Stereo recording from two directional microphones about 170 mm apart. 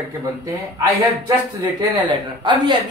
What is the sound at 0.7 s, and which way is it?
Speech, 20° right (ahead or behind).